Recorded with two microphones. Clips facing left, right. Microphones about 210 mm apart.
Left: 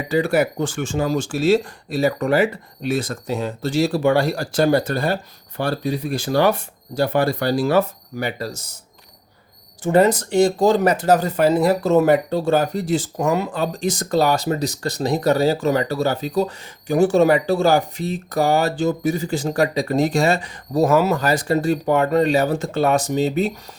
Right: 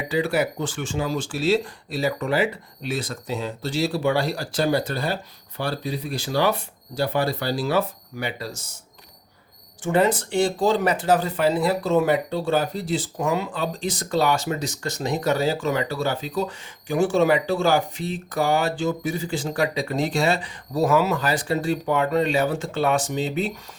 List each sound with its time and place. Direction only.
0.1 s speech: 45° left (ahead or behind)
9.8 s speech: 40° left (ahead or behind)